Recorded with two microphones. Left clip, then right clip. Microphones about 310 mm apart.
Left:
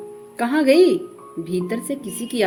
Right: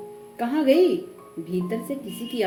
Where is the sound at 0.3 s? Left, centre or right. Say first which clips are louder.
Left 4 dB; left.